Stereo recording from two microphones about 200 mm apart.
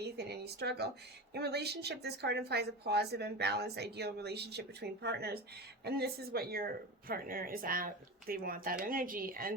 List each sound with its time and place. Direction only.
0.0 s a woman's voice: 55° right (ahead or behind)